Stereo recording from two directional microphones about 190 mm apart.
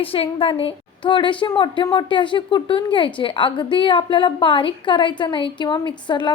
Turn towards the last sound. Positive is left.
turn(degrees=25)  # may be behind; listen again after turning